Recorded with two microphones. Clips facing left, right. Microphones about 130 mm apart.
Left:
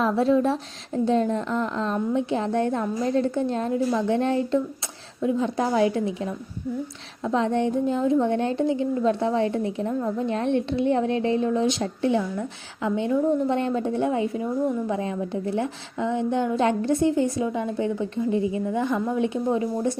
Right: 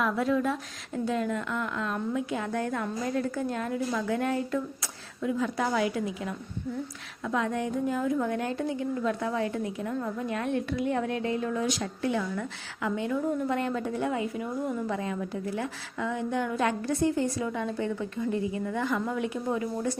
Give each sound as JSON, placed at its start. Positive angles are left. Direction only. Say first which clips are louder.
{"t": 0.0, "sound": "a woman's voice", "louder": "left 6 dB", "side_deg": 30}